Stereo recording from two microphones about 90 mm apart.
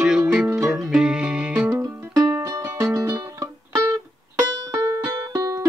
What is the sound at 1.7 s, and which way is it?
Music, 45° right (ahead or behind).